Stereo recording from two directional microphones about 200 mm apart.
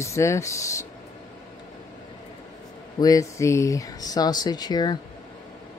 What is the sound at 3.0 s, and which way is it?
Speech, 15° left (ahead or behind).